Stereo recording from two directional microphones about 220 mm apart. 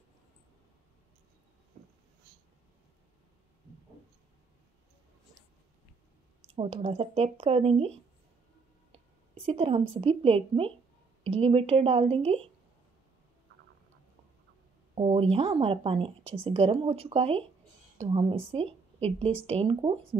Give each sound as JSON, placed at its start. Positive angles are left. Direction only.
{"t": 6.4, "sound": "speech", "side_deg": -25}
{"t": 9.3, "sound": "speech", "side_deg": -25}
{"t": 15.0, "sound": "a woman's voice", "side_deg": -30}